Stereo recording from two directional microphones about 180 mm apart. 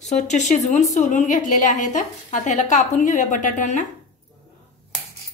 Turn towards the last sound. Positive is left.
turn(degrees=45)  # may be behind; listen again after turning